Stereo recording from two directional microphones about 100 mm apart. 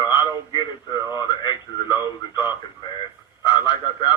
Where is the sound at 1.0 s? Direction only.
30° right (ahead or behind).